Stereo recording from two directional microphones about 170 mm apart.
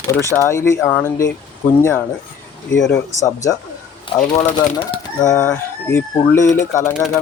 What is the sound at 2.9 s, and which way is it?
Speech, 20° left (ahead or behind).